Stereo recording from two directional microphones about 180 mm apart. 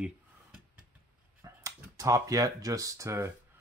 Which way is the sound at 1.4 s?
15° right (ahead or behind).